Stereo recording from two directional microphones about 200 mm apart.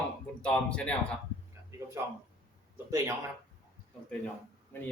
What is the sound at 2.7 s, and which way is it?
Speech, 15° right (ahead or behind).